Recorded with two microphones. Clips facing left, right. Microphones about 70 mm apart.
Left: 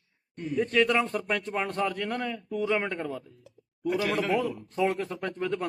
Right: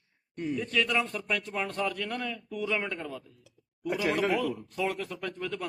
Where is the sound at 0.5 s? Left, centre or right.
Left.